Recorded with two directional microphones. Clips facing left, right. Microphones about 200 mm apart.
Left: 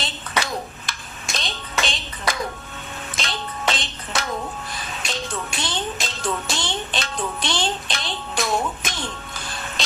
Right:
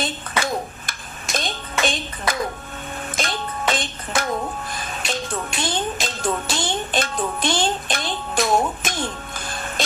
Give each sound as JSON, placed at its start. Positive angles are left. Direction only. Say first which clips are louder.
{"t": 0.0, "sound": "clapping", "louder": "right 3 dB", "side_deg": -50}
{"t": 3.2, "sound": "music", "louder": "right 3 dB", "side_deg": -50}